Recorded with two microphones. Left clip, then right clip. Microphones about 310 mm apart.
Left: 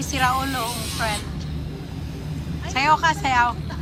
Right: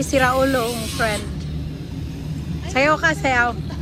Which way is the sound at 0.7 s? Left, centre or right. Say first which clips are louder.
Right 4 dB; left.